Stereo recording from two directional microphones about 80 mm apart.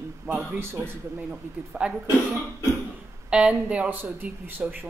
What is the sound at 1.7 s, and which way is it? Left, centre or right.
Speech, centre.